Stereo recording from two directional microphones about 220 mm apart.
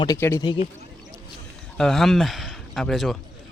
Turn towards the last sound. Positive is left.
turn(degrees=0)  # may be behind; listen again after turning